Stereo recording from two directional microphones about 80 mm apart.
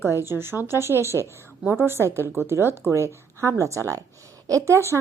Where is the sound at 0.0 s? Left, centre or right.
Right.